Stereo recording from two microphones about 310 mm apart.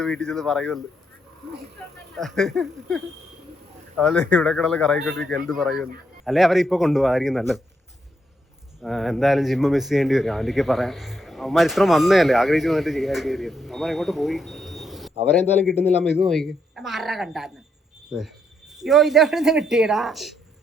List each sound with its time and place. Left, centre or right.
0.0 s speech: centre
2.1 s speech: centre
8.8 s speech: centre